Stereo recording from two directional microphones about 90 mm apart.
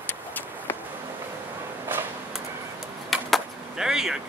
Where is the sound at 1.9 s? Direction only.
20° right (ahead or behind).